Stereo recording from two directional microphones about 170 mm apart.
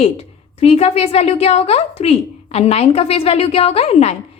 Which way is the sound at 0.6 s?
35° left (ahead or behind).